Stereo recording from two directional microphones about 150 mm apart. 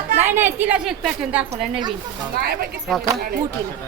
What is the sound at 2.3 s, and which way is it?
Speech, 90° right.